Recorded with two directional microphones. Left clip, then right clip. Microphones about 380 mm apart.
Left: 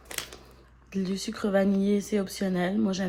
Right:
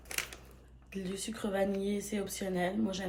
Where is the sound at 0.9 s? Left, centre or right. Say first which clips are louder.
Left 7 dB; centre.